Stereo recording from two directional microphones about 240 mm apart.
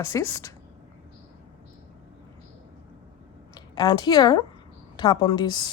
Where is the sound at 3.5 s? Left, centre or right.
Centre.